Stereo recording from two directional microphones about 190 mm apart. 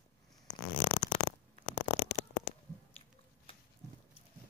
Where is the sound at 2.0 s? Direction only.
50° left (ahead or behind).